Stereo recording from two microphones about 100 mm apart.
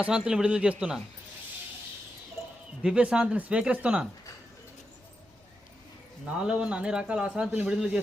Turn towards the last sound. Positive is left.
turn(degrees=-10)  # may be behind; listen again after turning